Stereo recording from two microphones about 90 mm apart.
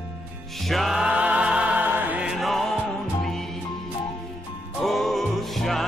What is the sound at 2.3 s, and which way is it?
Music, centre (ahead or behind).